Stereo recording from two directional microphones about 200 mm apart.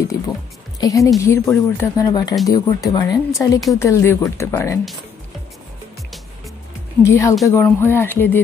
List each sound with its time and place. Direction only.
0.7 s speech: 15° left (ahead or behind)
7.0 s speech: 15° left (ahead or behind)